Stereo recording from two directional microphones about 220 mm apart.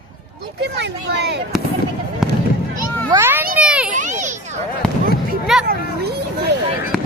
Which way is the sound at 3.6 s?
5° right (ahead or behind).